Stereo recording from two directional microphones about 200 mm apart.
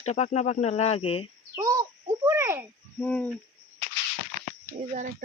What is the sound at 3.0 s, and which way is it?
Owl, 5° left (ahead or behind).